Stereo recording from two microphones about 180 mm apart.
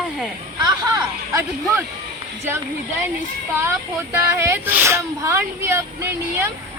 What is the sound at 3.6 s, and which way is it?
Speech, 15° right (ahead or behind).